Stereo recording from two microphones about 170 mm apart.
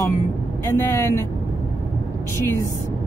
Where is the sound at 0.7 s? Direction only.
15° left (ahead or behind).